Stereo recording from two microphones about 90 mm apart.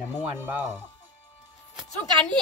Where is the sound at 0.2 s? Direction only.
20° right (ahead or behind).